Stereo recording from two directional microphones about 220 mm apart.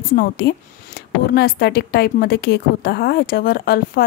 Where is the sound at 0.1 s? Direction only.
45° left (ahead or behind).